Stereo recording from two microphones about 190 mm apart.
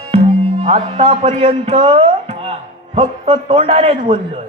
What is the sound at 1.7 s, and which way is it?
A man's voice, 30° right (ahead or behind).